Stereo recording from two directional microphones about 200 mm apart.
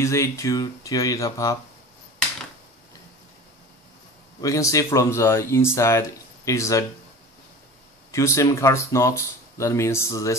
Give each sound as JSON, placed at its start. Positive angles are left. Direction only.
{"t": 0.0, "sound": "speech", "side_deg": 15}
{"t": 4.4, "sound": "speech", "side_deg": 15}
{"t": 8.1, "sound": "speech", "side_deg": 15}